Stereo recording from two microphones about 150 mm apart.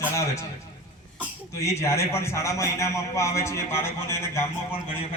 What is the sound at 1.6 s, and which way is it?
A man's voice, 20° left (ahead or behind).